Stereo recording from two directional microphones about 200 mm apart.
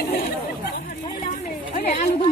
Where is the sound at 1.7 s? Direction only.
35° left (ahead or behind).